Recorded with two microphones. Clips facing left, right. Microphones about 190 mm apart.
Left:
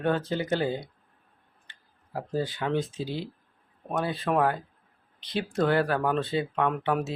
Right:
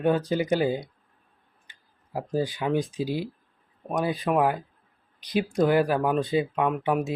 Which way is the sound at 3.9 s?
15° right (ahead or behind).